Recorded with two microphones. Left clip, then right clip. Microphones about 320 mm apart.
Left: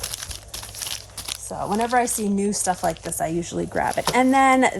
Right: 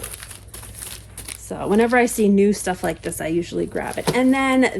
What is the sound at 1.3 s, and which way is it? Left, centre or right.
A woman's voice, centre.